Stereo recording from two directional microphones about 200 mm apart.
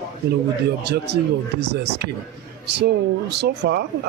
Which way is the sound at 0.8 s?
55° right (ahead or behind).